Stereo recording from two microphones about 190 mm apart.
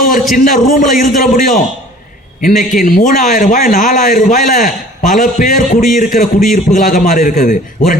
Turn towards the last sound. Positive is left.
turn(degrees=45)  # may be behind; listen again after turning